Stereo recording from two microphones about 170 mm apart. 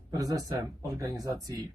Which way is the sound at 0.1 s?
20° right (ahead or behind).